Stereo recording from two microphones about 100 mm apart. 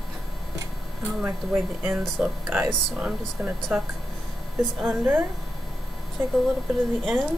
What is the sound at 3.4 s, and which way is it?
Speech, 25° right (ahead or behind).